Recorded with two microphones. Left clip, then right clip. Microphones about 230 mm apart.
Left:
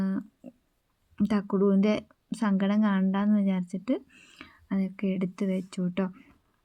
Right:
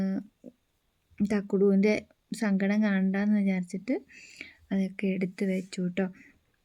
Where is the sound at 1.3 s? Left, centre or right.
Centre.